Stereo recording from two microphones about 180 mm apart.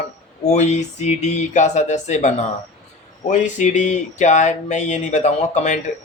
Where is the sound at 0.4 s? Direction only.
40° left (ahead or behind).